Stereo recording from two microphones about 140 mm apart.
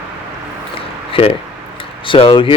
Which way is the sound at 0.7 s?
40° left (ahead or behind).